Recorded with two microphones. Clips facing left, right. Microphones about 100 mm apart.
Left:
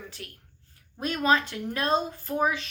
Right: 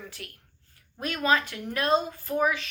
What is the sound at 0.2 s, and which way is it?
A woman's voice, 30° left (ahead or behind).